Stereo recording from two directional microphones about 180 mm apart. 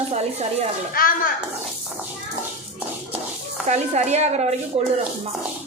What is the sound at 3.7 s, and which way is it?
Speech, 40° right (ahead or behind).